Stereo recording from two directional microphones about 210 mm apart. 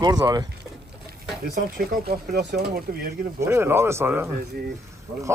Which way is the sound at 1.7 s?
50° right (ahead or behind).